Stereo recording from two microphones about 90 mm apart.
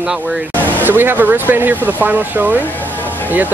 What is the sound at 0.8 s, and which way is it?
Speech, 20° right (ahead or behind).